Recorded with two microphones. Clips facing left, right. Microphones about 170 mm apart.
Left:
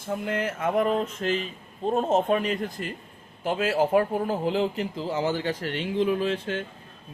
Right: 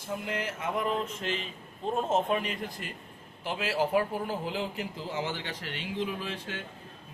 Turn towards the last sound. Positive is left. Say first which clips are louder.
# left 10 dB
turn(degrees=55)  # may be behind; listen again after turning